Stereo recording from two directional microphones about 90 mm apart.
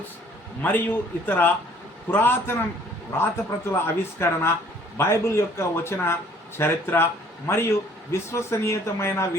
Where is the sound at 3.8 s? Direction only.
25° left (ahead or behind).